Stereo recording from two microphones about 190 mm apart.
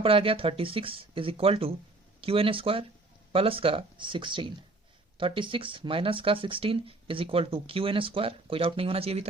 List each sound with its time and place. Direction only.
0.0 s speech: 30° right (ahead or behind)